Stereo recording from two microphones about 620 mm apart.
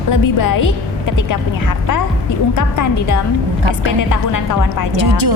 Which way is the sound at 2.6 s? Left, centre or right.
Left.